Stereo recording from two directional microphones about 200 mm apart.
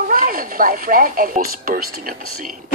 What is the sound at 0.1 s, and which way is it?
Speech, 45° right (ahead or behind).